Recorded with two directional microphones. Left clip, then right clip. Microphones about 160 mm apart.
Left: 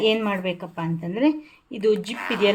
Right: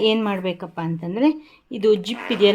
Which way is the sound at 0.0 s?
30° right (ahead or behind).